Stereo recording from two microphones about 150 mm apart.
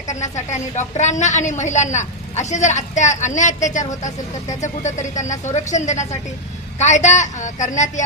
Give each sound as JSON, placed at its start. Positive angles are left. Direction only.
{"t": 0.1, "sound": "a woman's voice", "side_deg": 50}